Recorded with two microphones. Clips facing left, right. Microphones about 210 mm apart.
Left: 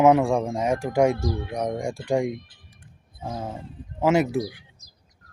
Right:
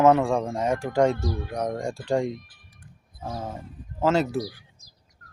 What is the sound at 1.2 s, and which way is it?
Speech, 25° left (ahead or behind).